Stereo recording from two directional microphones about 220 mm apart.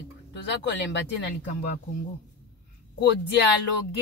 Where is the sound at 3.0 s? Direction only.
50° left (ahead or behind).